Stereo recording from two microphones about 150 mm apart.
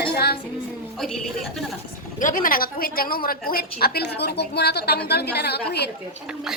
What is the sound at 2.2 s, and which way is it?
A woman's voice, 65° left (ahead or behind).